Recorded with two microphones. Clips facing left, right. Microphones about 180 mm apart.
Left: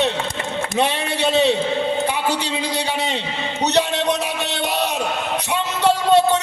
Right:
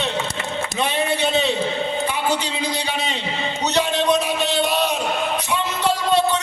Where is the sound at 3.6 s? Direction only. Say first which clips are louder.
Left 1 dB; 65° left (ahead or behind).